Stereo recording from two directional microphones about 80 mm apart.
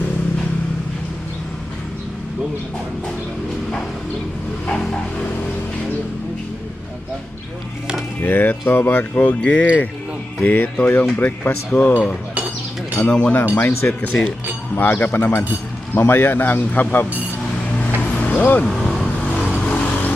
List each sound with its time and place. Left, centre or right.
4.6 s a sound: centre
8.2 s speech: left
17.7 s vehicle: centre
18.8 s vehicle: centre
19.3 s vehicle: centre